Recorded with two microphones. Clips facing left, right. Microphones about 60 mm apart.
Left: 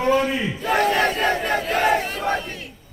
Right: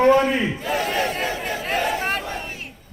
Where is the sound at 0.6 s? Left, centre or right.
Left.